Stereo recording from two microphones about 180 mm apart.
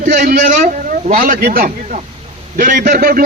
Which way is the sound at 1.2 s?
55° right (ahead or behind).